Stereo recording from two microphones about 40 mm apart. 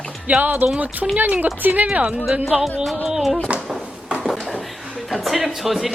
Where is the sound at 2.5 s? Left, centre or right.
Centre.